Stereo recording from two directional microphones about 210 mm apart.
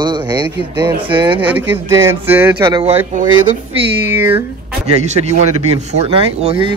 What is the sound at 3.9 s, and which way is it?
Speech, 10° right (ahead or behind).